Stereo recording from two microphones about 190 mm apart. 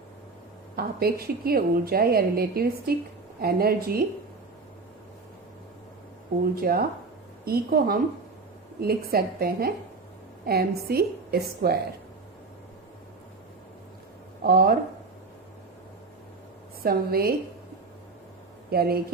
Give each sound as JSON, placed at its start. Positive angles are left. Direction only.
{"t": 0.8, "sound": "a woman's voice", "side_deg": -55}
{"t": 6.6, "sound": "a woman's voice", "side_deg": -50}
{"t": 14.4, "sound": "a woman's voice", "side_deg": -55}
{"t": 16.8, "sound": "a woman's voice", "side_deg": -55}
{"t": 18.7, "sound": "a woman's voice", "side_deg": -55}